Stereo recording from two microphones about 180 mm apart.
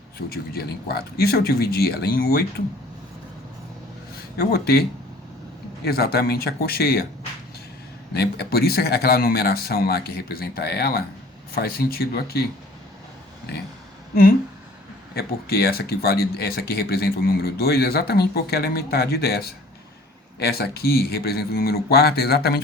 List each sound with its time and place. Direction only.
0.3 s speech: 60° left (ahead or behind)
4.1 s speech: 60° left (ahead or behind)
8.1 s speech: 65° left (ahead or behind)
15.1 s speech: 60° left (ahead or behind)